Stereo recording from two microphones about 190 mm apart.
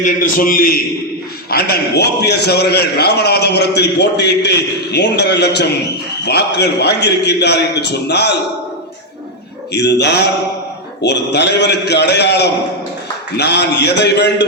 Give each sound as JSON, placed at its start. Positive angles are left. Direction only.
{"t": 0.0, "sound": "a man's voice", "side_deg": 45}
{"t": 9.7, "sound": "a man's voice", "side_deg": 65}